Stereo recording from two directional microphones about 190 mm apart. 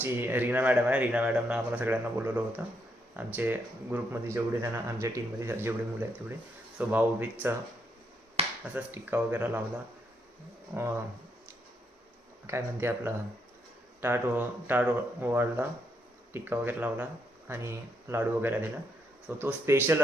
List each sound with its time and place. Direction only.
0.0 s speech: 10° right (ahead or behind)
8.4 s finger snapping: 30° right (ahead or behind)
8.7 s speech: 10° right (ahead or behind)
12.5 s speech: 15° right (ahead or behind)